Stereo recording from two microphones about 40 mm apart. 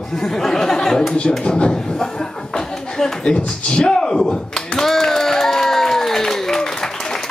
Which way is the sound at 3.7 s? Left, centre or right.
Centre.